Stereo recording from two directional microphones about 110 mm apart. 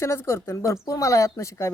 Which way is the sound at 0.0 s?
25° left (ahead or behind).